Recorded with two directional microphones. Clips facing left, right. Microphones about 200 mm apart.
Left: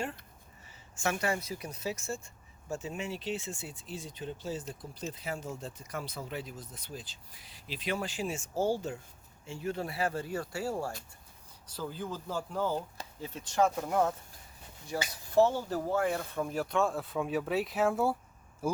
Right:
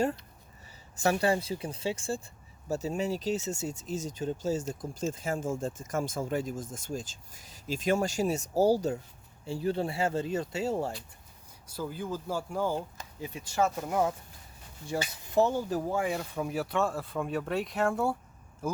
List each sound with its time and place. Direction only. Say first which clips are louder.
0.9 s speech: right 6 dB; 35° right (ahead or behind)
11.7 s speech: right 3 dB; 10° right (ahead or behind)
14.9 s speech: even; 25° right (ahead or behind); by 18.8 s 10° left (ahead or behind)